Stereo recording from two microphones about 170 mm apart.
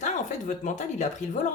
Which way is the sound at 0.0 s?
45° left (ahead or behind).